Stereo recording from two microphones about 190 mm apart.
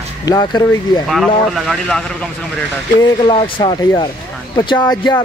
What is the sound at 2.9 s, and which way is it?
Speech, 25° left (ahead or behind).